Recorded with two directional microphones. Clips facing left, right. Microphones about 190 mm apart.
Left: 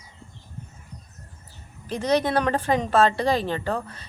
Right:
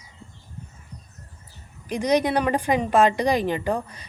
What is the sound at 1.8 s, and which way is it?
A woman's voice, 15° right (ahead or behind).